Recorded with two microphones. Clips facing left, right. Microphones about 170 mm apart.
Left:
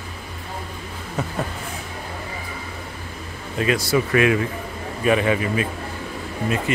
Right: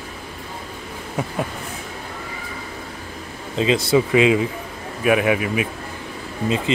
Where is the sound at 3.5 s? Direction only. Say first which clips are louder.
Right 3 dB; 25° right (ahead or behind).